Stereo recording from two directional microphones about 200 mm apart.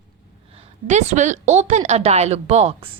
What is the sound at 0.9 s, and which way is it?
A woman's voice, 35° right (ahead or behind).